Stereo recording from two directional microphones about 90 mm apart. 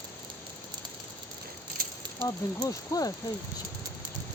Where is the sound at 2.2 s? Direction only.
45° left (ahead or behind).